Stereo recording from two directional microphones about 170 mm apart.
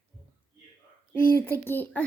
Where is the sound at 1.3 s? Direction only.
15° left (ahead or behind).